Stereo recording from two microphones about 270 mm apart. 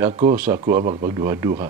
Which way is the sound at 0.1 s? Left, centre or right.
Right.